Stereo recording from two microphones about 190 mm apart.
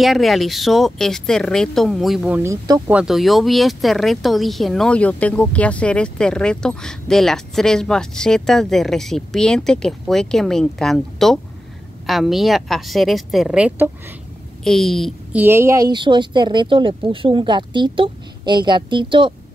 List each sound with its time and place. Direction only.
0.0 s speech: centre (ahead or behind); by 2.8 s 20° right (ahead or behind)
2.9 s a woman's voice: 5° right (ahead or behind)
15.4 s speech: 15° right (ahead or behind)